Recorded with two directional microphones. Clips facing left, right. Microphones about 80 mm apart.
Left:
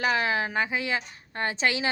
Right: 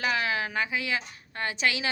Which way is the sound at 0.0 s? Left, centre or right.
Left.